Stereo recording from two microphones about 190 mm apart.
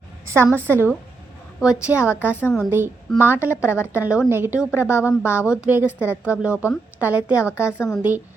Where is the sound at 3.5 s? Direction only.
15° left (ahead or behind).